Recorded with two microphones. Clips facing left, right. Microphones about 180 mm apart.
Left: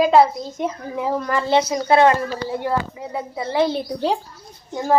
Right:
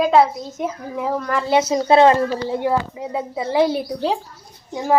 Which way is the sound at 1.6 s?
25° right (ahead or behind).